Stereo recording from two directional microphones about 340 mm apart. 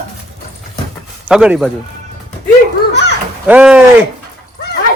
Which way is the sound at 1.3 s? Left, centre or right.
Centre.